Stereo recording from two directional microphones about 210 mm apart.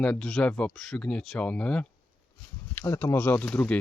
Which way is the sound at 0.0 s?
5° left (ahead or behind).